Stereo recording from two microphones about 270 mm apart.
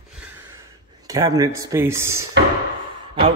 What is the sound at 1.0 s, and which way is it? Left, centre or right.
A man's voice, centre.